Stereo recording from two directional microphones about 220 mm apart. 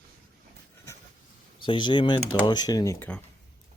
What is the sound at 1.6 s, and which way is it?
Speech, 20° left (ahead or behind).